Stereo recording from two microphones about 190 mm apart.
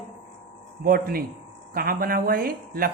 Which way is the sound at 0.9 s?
50° right (ahead or behind).